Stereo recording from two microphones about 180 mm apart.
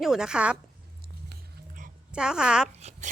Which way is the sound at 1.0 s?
55° right (ahead or behind).